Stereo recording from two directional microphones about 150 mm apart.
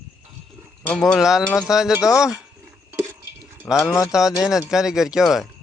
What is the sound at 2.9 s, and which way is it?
Dishes, 15° right (ahead or behind).